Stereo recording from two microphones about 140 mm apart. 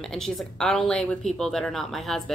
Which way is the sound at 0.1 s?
5° left (ahead or behind).